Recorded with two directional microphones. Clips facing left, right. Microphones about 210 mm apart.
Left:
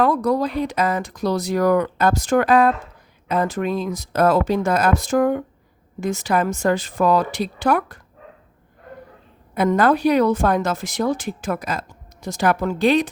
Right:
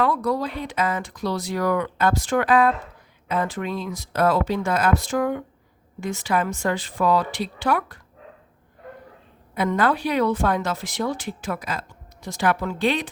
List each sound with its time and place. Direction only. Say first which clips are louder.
0.0 s speech: left 4 dB; 45° left (ahead or behind)
9.6 s speech: left 5 dB; 45° left (ahead or behind)